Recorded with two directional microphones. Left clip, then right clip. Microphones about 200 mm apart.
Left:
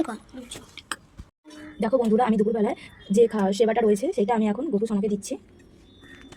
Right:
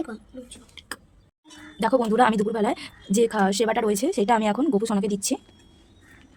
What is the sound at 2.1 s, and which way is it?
A woman's voice, 40° right (ahead or behind).